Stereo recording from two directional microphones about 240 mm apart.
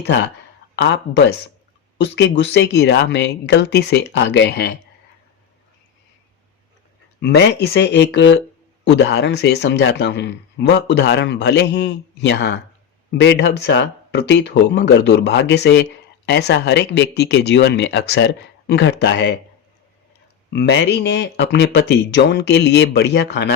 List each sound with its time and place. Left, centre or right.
0.8 s speech: left
7.2 s speech: left
20.5 s speech: left